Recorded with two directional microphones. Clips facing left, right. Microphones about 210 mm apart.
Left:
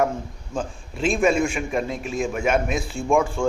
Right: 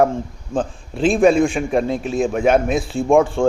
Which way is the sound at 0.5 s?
30° right (ahead or behind).